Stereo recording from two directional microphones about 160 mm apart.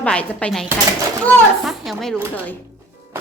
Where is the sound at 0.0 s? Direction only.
5° left (ahead or behind).